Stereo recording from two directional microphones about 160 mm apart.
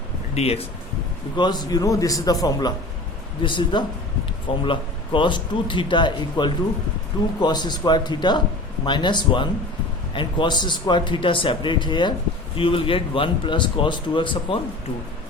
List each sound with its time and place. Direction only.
0.3 s speech: 40° left (ahead or behind)
1.4 s a man's voice: 25° left (ahead or behind)